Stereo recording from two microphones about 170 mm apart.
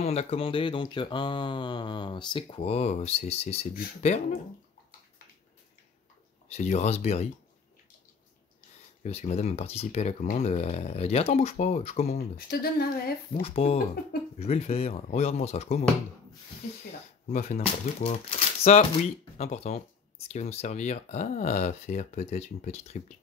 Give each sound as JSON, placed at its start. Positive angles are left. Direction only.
{"t": 0.0, "sound": "speech", "side_deg": 40}
{"t": 6.5, "sound": "speech", "side_deg": 40}
{"t": 9.0, "sound": "speech", "side_deg": 40}
{"t": 12.4, "sound": "speech", "side_deg": 65}
{"t": 13.3, "sound": "speech", "side_deg": 35}
{"t": 17.3, "sound": "speech", "side_deg": 45}